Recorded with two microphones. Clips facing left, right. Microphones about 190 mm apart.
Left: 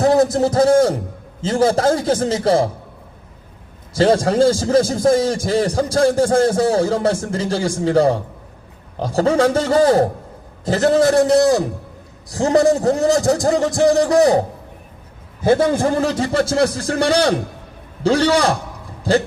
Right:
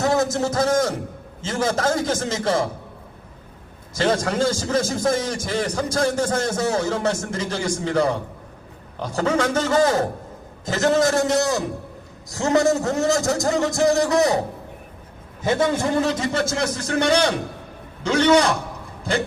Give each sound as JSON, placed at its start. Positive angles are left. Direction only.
{"t": 0.0, "sound": "a man's voice", "side_deg": 35}
{"t": 3.9, "sound": "speech", "side_deg": 35}
{"t": 15.4, "sound": "speech", "side_deg": 35}